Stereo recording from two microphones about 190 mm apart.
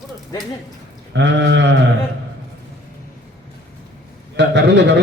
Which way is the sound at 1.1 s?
65° right (ahead or behind).